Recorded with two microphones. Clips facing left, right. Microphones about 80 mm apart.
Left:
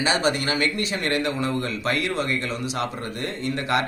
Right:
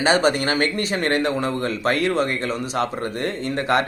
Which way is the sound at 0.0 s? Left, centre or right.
Right.